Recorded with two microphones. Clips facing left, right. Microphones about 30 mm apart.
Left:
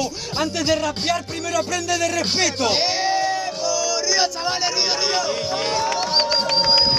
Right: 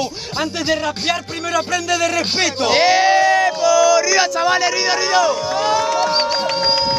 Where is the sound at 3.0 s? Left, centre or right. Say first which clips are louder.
Right 7 dB; right.